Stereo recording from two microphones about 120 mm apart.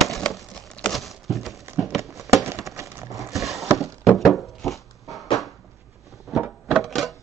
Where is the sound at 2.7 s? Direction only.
25° right (ahead or behind).